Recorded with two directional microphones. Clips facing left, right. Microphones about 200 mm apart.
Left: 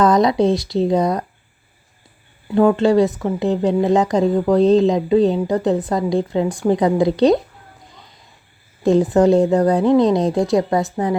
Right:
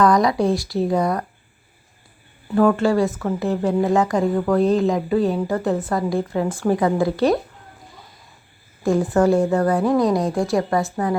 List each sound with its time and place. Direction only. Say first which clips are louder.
0.0 s speech: left 2 dB; 25° left (ahead or behind)
2.5 s speech: left 3 dB; 20° left (ahead or behind)
8.8 s speech: left 4 dB; 20° left (ahead or behind)